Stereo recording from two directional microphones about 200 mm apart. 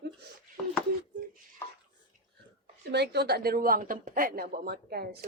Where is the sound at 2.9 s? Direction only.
55° right (ahead or behind).